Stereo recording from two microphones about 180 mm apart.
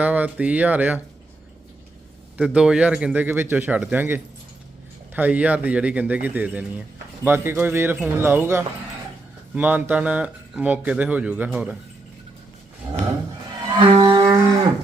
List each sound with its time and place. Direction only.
0.0 s speech: 10° right (ahead or behind)
2.4 s speech: 5° right (ahead or behind)
13.7 s music: 25° right (ahead or behind)